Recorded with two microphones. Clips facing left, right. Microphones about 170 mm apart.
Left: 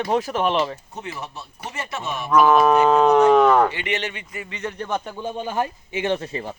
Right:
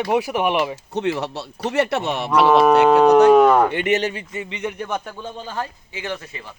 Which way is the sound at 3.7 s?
50° right (ahead or behind).